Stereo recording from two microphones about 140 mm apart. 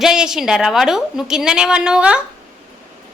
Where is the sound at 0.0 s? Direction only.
5° right (ahead or behind).